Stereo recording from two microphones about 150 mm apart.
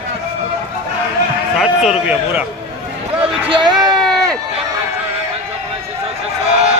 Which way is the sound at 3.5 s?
30° right (ahead or behind).